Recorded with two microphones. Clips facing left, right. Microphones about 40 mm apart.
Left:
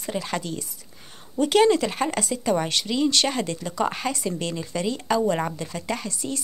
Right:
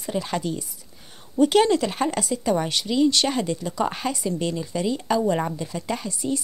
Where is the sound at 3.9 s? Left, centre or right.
Centre.